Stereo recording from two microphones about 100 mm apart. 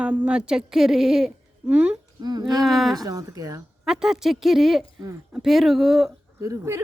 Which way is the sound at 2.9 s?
40° right (ahead or behind).